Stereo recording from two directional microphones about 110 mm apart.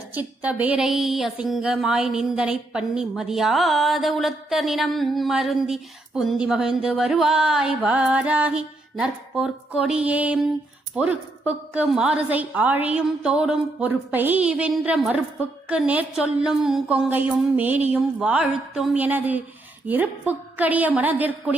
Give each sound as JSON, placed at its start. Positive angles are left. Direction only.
{"t": 0.1, "sound": "a woman's voice", "side_deg": -15}
{"t": 17.1, "sound": "a woman's voice", "side_deg": -15}